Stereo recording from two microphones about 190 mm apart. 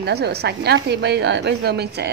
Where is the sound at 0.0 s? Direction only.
60° right (ahead or behind).